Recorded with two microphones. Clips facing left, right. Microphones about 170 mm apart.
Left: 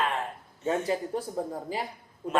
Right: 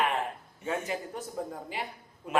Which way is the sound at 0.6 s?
35° left (ahead or behind).